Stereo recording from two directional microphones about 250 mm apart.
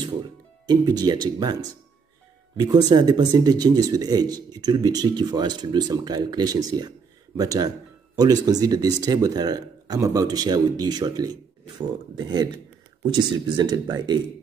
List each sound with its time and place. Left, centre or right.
0.7 s speech: centre
13.1 s speech: centre